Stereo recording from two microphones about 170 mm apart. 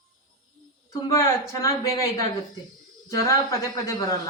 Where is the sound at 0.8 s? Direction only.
20° left (ahead or behind).